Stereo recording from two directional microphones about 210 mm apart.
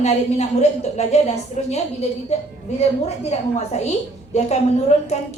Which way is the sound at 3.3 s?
30° left (ahead or behind).